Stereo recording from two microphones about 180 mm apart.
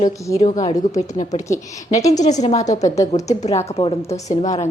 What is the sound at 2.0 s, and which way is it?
Speech, 20° left (ahead or behind).